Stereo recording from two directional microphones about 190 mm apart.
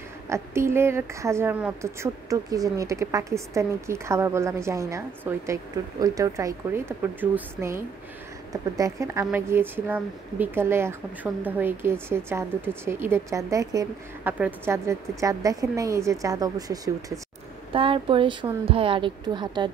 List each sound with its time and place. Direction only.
0.3 s a woman's voice: 15° right (ahead or behind)